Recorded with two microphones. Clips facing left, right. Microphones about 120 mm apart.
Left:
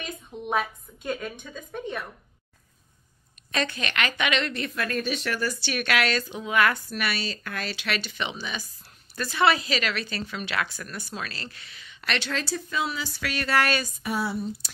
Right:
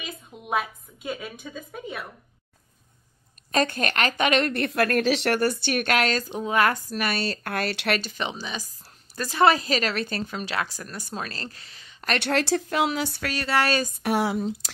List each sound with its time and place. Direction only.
0.0 s a woman's voice: centre (ahead or behind)
3.5 s a woman's voice: 45° right (ahead or behind)
7.2 s speech: 60° right (ahead or behind)
8.0 s a woman's voice: 35° right (ahead or behind)
12.2 s a woman's voice: 65° right (ahead or behind)
13.2 s a woman's voice: 35° right (ahead or behind)
14.0 s speech: 85° right